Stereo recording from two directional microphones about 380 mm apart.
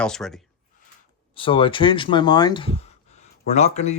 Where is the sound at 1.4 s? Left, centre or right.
Centre.